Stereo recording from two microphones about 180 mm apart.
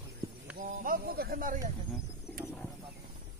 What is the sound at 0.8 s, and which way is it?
Speech, 55° right (ahead or behind).